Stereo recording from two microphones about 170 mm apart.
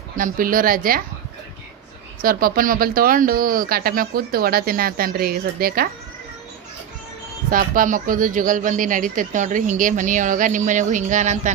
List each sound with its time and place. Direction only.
0.2 s speech: 55° right (ahead or behind)
2.2 s speech: 55° right (ahead or behind)
7.5 s speech: 55° right (ahead or behind)